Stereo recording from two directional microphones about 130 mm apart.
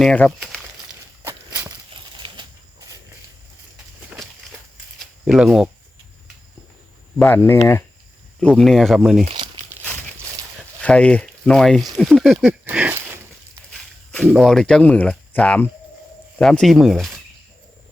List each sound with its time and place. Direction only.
0.0 s crumpling: 5° left (ahead or behind)
1.2 s walk: 15° right (ahead or behind)
2.2 s a sound: 40° right (ahead or behind)
4.9 s a sound: centre (ahead or behind)
7.2 s speech: 15° left (ahead or behind)
8.4 s speech: 5° left (ahead or behind)
10.8 s speech: 10° left (ahead or behind)
12.7 s a sound: 15° right (ahead or behind)
14.3 s speech: centre (ahead or behind)